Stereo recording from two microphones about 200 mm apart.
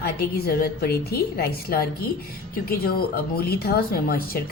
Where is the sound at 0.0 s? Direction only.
50° left (ahead or behind).